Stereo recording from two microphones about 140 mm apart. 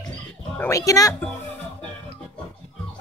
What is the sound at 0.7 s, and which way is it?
Speech, 25° left (ahead or behind).